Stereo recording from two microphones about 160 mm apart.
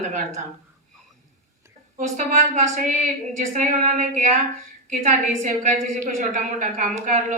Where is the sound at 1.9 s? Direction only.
50° right (ahead or behind).